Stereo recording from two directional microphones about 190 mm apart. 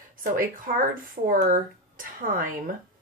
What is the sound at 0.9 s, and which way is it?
Speech, 45° right (ahead or behind).